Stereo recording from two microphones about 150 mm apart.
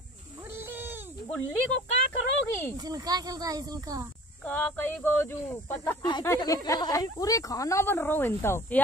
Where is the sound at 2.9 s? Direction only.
25° right (ahead or behind).